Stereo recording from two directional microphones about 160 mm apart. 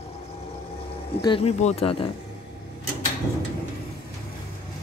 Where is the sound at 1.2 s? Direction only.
30° left (ahead or behind).